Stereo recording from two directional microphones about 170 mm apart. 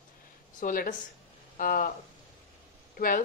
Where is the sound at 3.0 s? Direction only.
55° left (ahead or behind).